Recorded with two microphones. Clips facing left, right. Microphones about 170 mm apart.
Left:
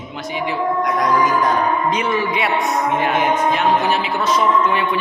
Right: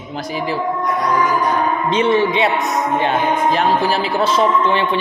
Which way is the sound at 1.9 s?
25° right (ahead or behind).